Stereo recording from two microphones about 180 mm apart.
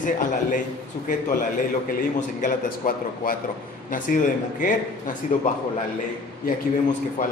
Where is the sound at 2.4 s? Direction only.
50° left (ahead or behind).